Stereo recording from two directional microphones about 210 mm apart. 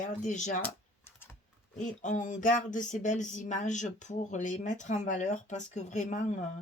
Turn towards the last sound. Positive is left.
turn(degrees=35)  # may be behind; listen again after turning